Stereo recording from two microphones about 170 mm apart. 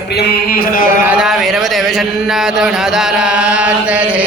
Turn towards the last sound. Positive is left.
turn(degrees=-5)  # may be behind; listen again after turning